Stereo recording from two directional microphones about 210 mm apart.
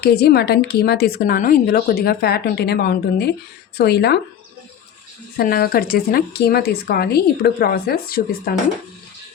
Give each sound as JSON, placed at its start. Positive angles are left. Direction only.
{"t": 0.0, "sound": "a woman's voice", "side_deg": 50}
{"t": 5.4, "sound": "a woman's voice", "side_deg": 45}